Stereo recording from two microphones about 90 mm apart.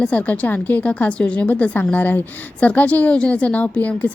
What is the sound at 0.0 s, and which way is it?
A woman's voice, 15° left (ahead or behind).